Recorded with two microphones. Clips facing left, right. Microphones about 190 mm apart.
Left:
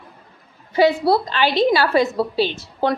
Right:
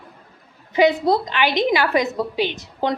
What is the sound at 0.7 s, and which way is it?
A woman's voice, 20° right (ahead or behind).